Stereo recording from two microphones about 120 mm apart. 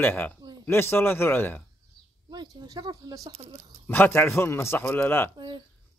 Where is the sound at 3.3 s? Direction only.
60° right (ahead or behind).